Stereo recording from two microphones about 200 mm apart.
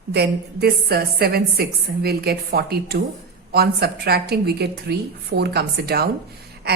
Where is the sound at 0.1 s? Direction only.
55° right (ahead or behind).